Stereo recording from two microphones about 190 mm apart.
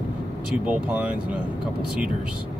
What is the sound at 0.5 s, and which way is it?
Speech, 5° right (ahead or behind).